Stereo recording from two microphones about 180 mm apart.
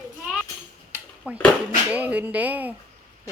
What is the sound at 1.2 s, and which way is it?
Speech, 10° right (ahead or behind).